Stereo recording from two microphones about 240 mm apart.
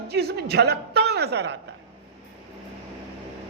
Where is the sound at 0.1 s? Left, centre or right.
Right.